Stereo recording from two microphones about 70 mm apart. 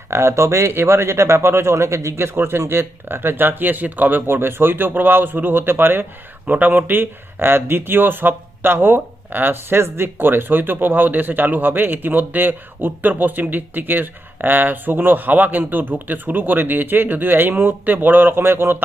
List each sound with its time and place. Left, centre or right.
0.1 s speech: right